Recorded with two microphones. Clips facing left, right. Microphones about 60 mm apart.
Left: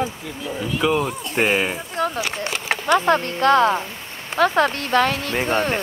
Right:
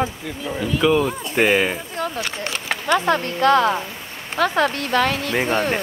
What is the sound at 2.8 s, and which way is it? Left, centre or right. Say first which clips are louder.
Speech: left 1 dB; left.